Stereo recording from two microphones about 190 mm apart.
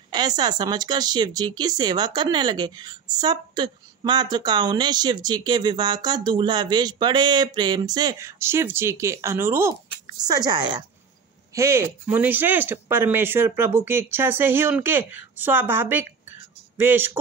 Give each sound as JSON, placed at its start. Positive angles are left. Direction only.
{"t": 0.1, "sound": "speech", "side_deg": -20}